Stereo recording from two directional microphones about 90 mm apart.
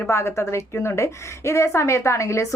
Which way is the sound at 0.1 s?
30° left (ahead or behind).